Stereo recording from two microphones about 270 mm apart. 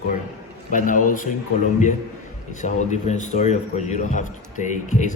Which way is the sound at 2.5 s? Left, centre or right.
Left.